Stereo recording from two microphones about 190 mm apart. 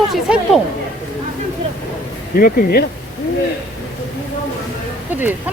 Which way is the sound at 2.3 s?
50° left (ahead or behind).